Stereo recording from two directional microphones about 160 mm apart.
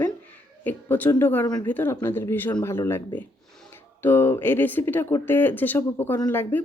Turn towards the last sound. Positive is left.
turn(degrees=15)  # may be behind; listen again after turning